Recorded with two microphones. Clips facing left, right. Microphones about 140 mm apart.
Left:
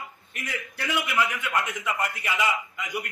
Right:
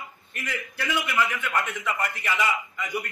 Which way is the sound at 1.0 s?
5° left (ahead or behind).